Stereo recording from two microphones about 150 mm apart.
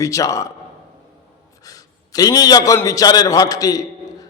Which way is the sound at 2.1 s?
25° left (ahead or behind).